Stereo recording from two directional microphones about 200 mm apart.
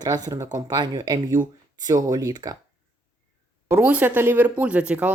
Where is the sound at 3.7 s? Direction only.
5° right (ahead or behind).